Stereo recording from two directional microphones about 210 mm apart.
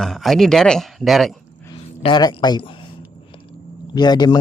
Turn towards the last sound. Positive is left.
turn(degrees=20)  # may be behind; listen again after turning